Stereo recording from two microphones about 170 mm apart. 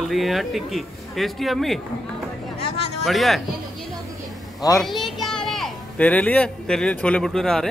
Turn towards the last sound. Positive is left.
turn(degrees=5)  # may be behind; listen again after turning